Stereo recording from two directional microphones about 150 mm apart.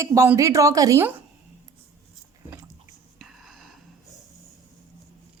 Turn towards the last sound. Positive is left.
turn(degrees=0)  # may be behind; listen again after turning